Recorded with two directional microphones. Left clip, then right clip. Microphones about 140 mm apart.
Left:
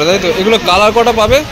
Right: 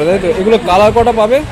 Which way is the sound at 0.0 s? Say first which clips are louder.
Left 1 dB; 15° right (ahead or behind).